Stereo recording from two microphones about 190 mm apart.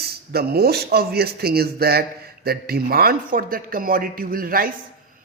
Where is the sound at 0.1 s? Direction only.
55° right (ahead or behind).